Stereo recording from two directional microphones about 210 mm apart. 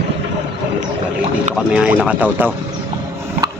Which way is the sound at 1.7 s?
5° right (ahead or behind).